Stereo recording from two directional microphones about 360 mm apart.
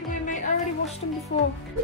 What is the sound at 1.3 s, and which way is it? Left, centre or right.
Speech, centre.